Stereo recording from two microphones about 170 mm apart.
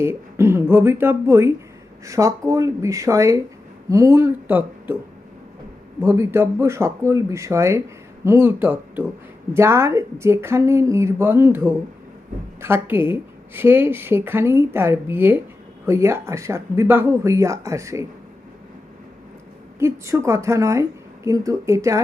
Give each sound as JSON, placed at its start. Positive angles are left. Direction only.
{"t": 0.0, "sound": "speech", "side_deg": -15}
{"t": 6.0, "sound": "speech", "side_deg": -15}
{"t": 19.8, "sound": "speech", "side_deg": -15}